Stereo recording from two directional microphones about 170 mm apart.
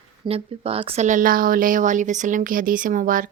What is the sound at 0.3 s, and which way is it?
Speech, 35° right (ahead or behind).